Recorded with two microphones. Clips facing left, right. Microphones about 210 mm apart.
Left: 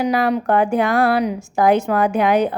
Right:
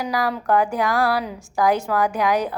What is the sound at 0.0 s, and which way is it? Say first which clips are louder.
A woman's voice: left 6 dB; 25° left (ahead or behind).